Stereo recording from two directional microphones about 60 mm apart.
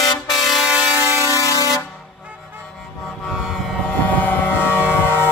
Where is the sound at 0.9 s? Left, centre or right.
Left.